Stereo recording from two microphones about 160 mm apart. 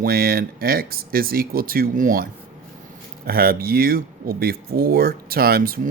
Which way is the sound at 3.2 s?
70° right (ahead or behind).